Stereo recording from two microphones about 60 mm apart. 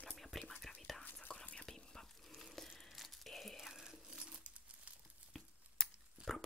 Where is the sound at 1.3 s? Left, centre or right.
Centre.